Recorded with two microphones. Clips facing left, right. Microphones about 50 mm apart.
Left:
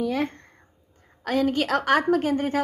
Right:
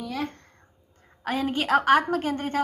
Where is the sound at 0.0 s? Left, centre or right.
Left.